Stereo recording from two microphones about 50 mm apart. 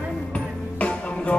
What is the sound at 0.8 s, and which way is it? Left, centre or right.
Music, left.